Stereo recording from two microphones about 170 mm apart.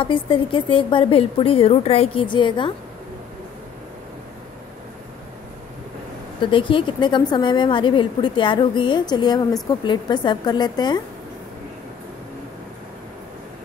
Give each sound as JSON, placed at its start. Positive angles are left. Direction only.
{"t": 0.0, "sound": "a woman's voice", "side_deg": 30}
{"t": 6.4, "sound": "a woman's voice", "side_deg": 30}